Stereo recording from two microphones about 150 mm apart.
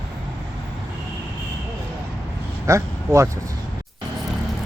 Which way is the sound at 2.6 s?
20° right (ahead or behind).